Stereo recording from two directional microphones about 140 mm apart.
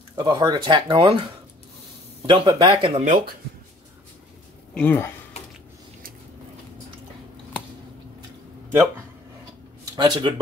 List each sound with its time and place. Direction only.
0.2 s speech: 30° right (ahead or behind)
2.2 s speech: 35° right (ahead or behind)
3.0 s speech: 65° right (ahead or behind)
4.7 s speech: 15° left (ahead or behind)
9.9 s speech: 30° right (ahead or behind)